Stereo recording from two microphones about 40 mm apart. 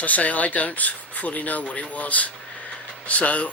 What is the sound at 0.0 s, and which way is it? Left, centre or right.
Speech, left.